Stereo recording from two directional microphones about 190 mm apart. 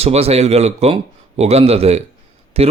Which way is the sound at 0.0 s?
35° right (ahead or behind).